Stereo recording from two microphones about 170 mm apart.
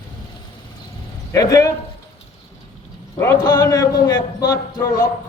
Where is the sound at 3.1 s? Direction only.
20° left (ahead or behind).